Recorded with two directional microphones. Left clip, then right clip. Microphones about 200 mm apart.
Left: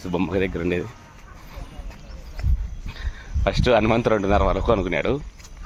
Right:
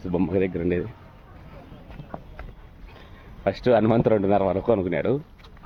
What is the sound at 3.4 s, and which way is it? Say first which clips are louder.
Speech: left 1 dB; 15° right (ahead or behind).